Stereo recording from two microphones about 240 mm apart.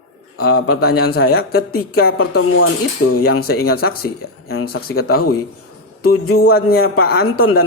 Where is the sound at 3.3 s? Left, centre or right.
Left.